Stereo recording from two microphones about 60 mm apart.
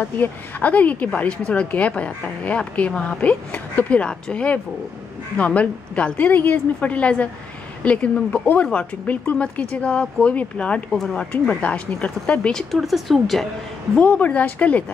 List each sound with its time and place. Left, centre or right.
0.0 s speech: left
12.7 s speech: centre
13.9 s speech: left